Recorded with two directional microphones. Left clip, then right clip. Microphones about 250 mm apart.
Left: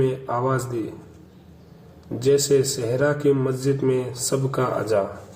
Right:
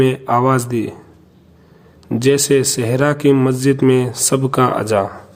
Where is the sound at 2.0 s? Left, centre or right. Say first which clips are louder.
Right 5 dB; right.